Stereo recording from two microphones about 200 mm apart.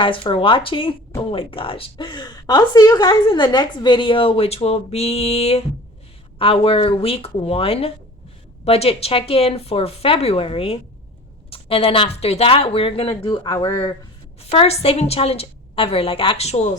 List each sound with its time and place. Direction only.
0.0 s a woman's voice: 25° left (ahead or behind)